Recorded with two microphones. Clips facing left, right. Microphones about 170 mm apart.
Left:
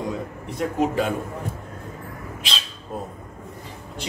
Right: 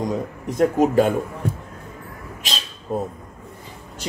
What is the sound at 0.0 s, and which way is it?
Speech, 40° right (ahead or behind).